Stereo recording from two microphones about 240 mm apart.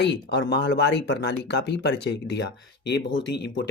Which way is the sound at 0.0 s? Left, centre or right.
Left.